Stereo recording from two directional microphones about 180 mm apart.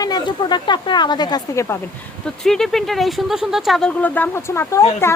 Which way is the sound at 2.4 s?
Centre (ahead or behind).